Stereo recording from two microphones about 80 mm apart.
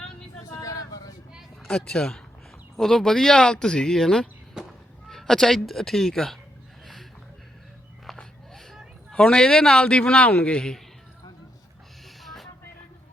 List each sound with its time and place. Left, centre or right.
0.4 s vehicle: left
1.6 s a man's voice: centre
4.6 s a sound: centre
5.0 s speech: centre
8.0 s a sound: centre
9.1 s a man's voice: centre
12.2 s vehicle: centre